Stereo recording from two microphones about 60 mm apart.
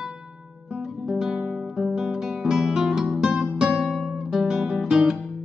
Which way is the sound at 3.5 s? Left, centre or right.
Centre.